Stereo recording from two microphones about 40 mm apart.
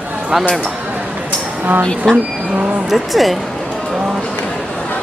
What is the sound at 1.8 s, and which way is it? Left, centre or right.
Speech, centre.